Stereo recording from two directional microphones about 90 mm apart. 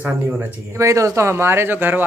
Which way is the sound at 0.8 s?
35° right (ahead or behind).